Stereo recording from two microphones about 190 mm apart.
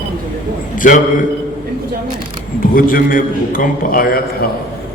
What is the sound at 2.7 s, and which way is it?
A man's voice, 45° left (ahead or behind).